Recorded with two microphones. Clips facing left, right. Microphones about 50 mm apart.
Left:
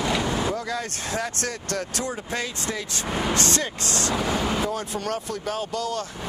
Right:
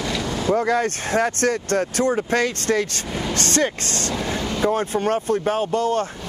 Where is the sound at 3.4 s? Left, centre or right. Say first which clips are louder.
Right 5 dB; right.